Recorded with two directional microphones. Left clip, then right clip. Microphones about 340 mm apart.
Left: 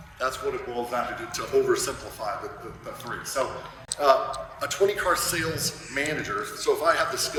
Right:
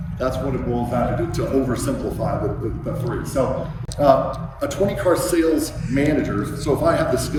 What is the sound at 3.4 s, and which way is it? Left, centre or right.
A man's voice, centre.